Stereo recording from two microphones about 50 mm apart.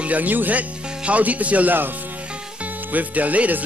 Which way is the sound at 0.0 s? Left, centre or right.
Right.